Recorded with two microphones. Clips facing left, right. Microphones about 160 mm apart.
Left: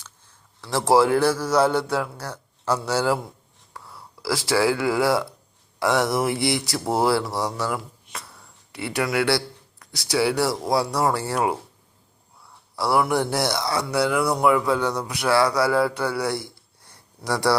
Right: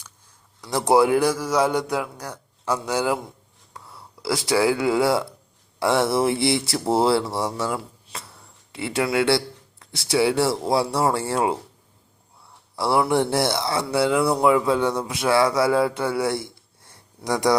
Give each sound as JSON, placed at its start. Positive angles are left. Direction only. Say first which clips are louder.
{"t": 0.6, "sound": "a man's voice", "louder": "even", "side_deg": -20}
{"t": 12.7, "sound": "speech", "louder": "right 1 dB", "side_deg": -25}